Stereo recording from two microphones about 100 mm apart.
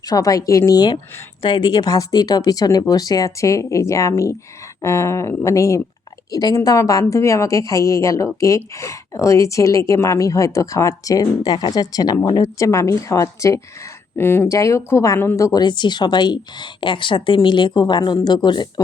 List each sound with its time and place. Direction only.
0.0 s speech: 40° left (ahead or behind)
15.6 s a woman's voice: 50° left (ahead or behind)